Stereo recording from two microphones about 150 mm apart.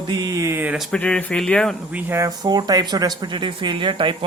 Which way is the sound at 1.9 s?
15° right (ahead or behind).